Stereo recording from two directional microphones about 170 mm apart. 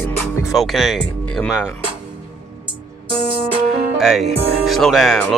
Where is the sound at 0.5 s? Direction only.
Centre (ahead or behind).